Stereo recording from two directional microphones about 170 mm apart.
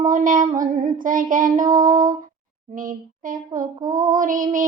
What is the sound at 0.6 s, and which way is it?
Female singing, 50° right (ahead or behind).